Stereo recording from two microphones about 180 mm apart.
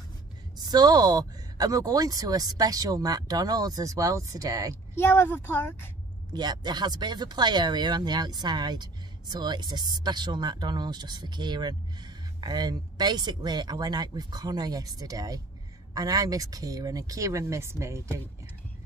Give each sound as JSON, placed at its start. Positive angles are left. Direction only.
{"t": 0.7, "sound": "speech", "side_deg": -20}
{"t": 4.9, "sound": "a woman's voice", "side_deg": 15}
{"t": 6.3, "sound": "speech", "side_deg": -25}